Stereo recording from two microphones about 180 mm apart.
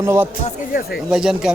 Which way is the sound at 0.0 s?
15° right (ahead or behind).